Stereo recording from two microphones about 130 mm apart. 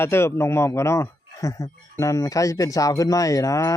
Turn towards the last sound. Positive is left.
turn(degrees=25)  # may be behind; listen again after turning